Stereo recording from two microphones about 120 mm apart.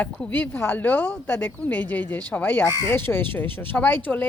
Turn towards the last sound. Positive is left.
turn(degrees=15)  # may be behind; listen again after turning